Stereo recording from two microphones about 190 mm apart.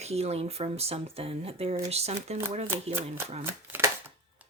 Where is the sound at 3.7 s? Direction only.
10° right (ahead or behind).